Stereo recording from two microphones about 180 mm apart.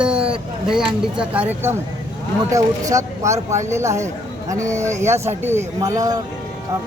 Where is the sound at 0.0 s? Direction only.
5° right (ahead or behind).